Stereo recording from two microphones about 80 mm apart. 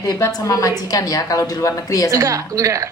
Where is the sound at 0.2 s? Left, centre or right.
Left.